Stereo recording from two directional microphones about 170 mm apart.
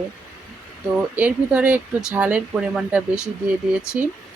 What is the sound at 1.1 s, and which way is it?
Speech, 10° right (ahead or behind).